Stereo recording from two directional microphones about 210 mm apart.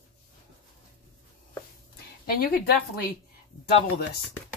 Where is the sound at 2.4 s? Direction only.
45° left (ahead or behind).